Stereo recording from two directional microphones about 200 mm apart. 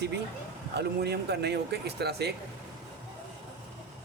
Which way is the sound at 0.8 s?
55° right (ahead or behind).